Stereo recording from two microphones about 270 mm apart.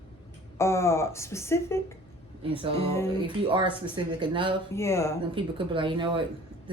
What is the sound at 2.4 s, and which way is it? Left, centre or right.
Speech, centre.